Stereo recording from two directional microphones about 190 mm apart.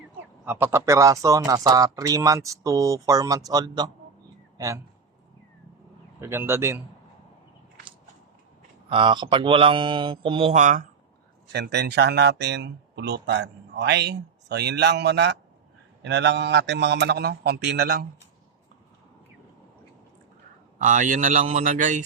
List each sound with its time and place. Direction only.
0.4 s speech: 10° right (ahead or behind)
6.1 s speech: 15° right (ahead or behind)
8.9 s speech: 25° right (ahead or behind)
10.6 s speech: 40° right (ahead or behind)
11.4 s speech: 60° right (ahead or behind)
20.7 s a man's voice: 45° right (ahead or behind)